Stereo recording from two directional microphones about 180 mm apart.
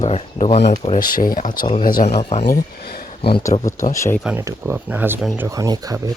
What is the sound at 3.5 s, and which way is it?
Speech, 30° left (ahead or behind).